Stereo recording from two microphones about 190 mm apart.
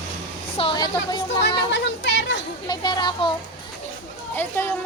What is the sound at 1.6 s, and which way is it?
Speech, 65° left (ahead or behind).